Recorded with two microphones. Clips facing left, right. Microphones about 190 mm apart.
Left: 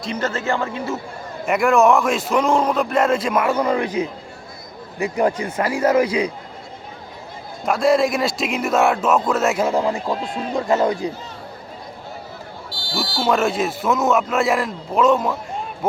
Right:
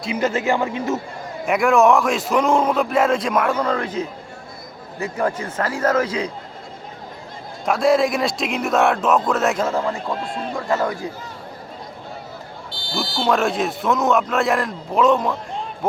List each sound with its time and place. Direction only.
0.0 s speech: 10° right (ahead or behind)
1.5 s a man's voice: centre (ahead or behind)
7.6 s speech: centre (ahead or behind)
9.6 s a man's voice: 15° left (ahead or behind)
10.2 s speech: centre (ahead or behind)
10.5 s a man's voice: 20° left (ahead or behind)
13.1 s speech: centre (ahead or behind)